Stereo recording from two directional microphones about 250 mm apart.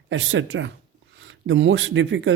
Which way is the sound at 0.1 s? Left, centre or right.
Right.